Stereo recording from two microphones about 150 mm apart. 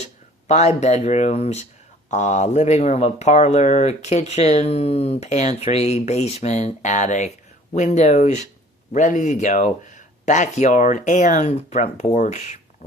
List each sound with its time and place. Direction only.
0.0 s speech: 50° left (ahead or behind)